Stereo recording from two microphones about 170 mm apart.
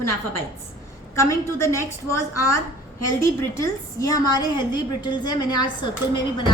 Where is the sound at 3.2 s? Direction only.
15° left (ahead or behind).